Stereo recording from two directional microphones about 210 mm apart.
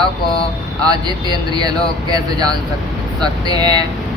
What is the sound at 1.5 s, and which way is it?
Speech, 20° right (ahead or behind).